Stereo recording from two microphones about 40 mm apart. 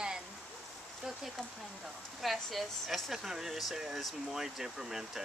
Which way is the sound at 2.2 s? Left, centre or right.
Centre.